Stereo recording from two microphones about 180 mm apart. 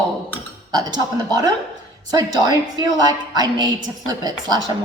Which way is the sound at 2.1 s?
20° right (ahead or behind).